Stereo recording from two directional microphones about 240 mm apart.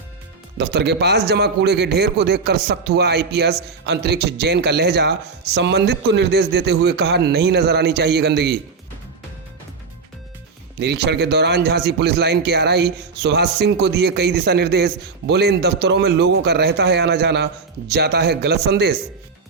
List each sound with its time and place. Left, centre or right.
0.6 s a man's voice: right
10.8 s a man's voice: right